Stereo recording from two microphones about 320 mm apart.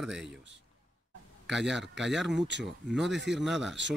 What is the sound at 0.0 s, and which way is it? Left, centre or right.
Speech, centre.